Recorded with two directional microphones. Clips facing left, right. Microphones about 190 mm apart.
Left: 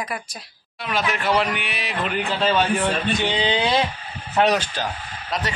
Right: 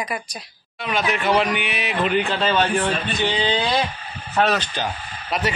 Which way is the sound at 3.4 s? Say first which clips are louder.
Left 2 dB; 20° left (ahead or behind).